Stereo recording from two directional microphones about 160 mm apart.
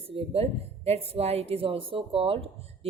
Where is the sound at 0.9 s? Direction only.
40° right (ahead or behind).